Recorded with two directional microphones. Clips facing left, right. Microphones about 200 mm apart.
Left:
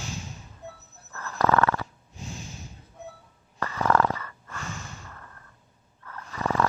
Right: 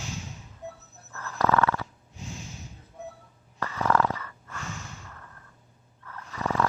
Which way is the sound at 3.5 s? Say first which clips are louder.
Left 2 dB; 50° left (ahead or behind).